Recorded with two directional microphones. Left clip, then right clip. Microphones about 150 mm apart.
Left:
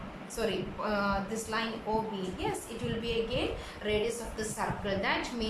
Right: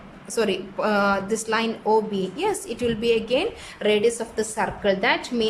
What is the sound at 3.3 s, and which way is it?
A woman's voice, 90° right.